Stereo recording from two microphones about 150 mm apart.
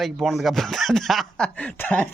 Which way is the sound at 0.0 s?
Centre (ahead or behind).